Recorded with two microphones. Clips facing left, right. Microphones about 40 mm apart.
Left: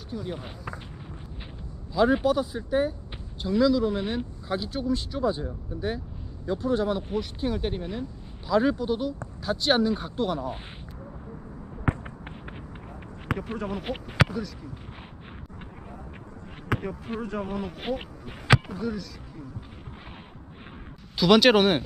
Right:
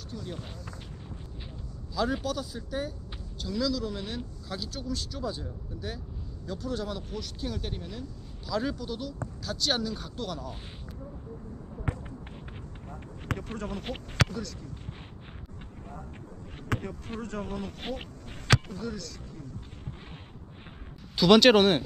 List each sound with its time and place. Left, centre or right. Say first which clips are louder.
0.1 s speech: left 6 dB; centre
2.0 s speech: left 8 dB; left
11.9 s fireworks: left 7 dB; left
13.3 s speech: left 4 dB; centre
16.6 s speech: left 4 dB; centre
21.2 s speech: even; centre